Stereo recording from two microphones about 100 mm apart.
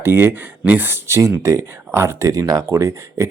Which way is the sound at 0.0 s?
25° right (ahead or behind).